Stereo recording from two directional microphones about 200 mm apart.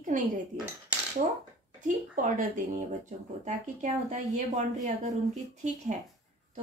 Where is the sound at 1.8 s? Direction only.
40° right (ahead or behind).